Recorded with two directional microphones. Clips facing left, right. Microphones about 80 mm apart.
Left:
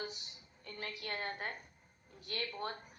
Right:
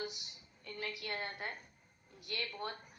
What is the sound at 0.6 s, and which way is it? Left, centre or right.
A woman's voice, left.